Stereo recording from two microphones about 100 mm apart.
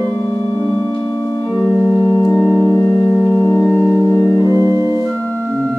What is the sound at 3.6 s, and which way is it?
Singing bowl, 5° left (ahead or behind).